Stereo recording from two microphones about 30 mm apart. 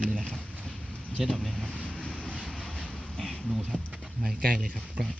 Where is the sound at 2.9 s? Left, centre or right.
Centre.